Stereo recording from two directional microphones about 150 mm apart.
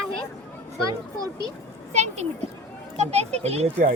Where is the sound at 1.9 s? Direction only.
50° right (ahead or behind).